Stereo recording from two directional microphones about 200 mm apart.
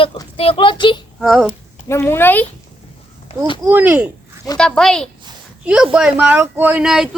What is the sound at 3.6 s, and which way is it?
Speech, 10° right (ahead or behind).